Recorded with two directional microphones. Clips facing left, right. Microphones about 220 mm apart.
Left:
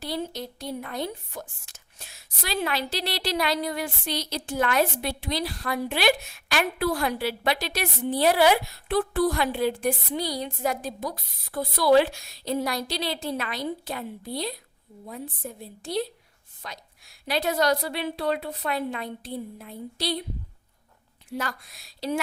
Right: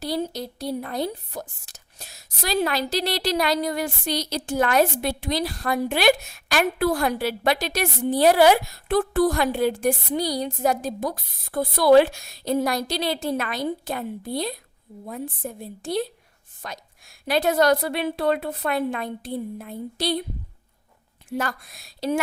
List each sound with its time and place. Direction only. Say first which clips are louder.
0.0 s a woman's voice: right 4 dB; 40° right (ahead or behind)
21.2 s a woman's voice: right 4 dB; 50° right (ahead or behind)